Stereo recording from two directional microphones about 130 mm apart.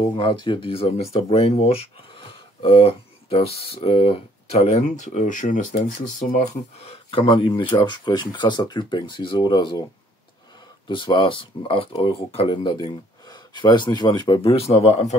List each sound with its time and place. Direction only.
0.2 s speech: 35° left (ahead or behind); by 6.4 s 80° left
7.1 s speech: 40° left (ahead or behind)
10.9 s speech: 40° left (ahead or behind)